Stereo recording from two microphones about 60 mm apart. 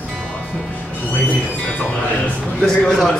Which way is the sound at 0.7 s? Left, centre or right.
Left.